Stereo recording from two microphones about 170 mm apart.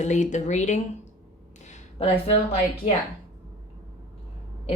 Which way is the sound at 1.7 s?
40° left (ahead or behind).